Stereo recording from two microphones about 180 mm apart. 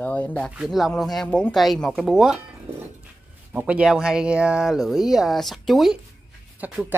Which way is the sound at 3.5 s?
5° right (ahead or behind).